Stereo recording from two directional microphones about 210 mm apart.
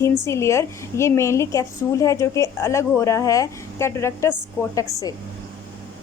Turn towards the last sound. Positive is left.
turn(degrees=15)  # may be behind; listen again after turning